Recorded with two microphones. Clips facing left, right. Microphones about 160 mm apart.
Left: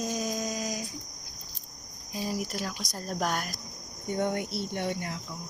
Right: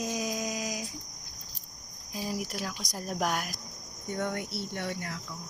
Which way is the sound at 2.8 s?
15° right (ahead or behind).